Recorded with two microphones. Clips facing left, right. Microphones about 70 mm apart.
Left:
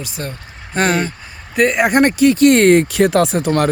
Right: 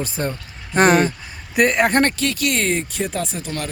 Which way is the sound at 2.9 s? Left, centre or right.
Left.